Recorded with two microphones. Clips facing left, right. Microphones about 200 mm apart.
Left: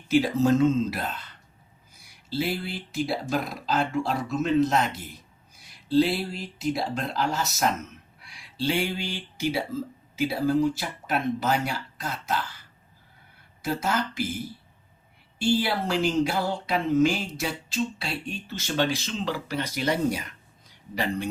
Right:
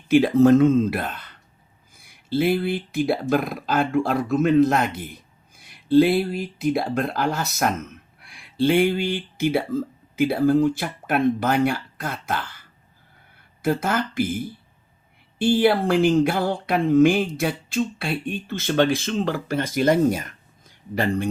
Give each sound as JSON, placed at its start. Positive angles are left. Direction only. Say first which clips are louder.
{"t": 0.1, "sound": "speech", "louder": "right 7 dB", "side_deg": -55}
{"t": 13.6, "sound": "speech", "louder": "right 5 dB", "side_deg": -55}
{"t": 15.4, "sound": "speech", "louder": "right 7 dB", "side_deg": -55}